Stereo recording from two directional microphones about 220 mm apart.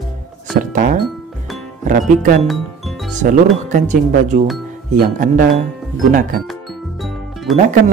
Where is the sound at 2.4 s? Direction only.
Centre (ahead or behind).